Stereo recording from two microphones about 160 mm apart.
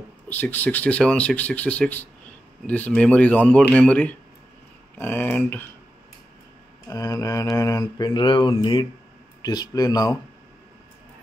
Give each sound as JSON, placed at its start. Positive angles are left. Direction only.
{"t": 0.3, "sound": "speech", "side_deg": 10}
{"t": 6.9, "sound": "mantra", "side_deg": 20}